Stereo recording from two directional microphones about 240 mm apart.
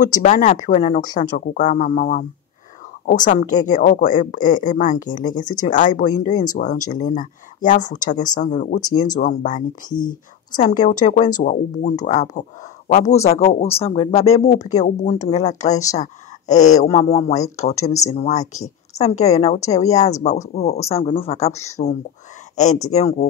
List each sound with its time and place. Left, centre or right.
0.2 s speech: left